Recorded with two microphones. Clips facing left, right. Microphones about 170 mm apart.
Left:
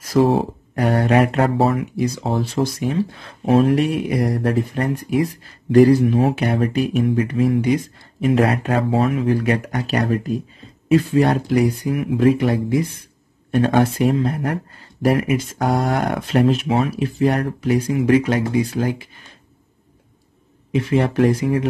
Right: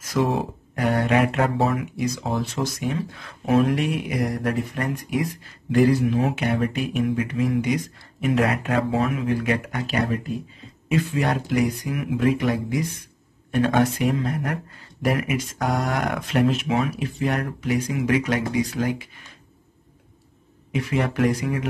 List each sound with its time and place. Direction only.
0.0 s speech: 35° left (ahead or behind)
20.7 s speech: 30° left (ahead or behind)